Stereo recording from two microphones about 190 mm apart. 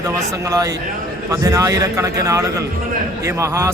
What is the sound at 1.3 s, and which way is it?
Speech, 15° right (ahead or behind).